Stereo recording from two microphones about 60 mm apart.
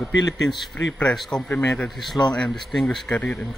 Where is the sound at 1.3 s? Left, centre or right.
Left.